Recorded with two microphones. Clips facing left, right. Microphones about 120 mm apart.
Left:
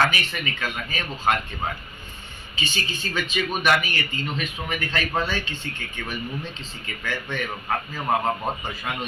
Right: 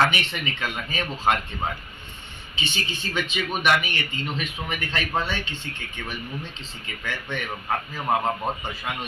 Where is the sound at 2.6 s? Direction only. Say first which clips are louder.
Left 1 dB; 25° right (ahead or behind).